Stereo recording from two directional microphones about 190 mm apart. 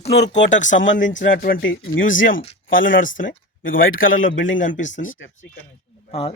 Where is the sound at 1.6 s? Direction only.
85° left.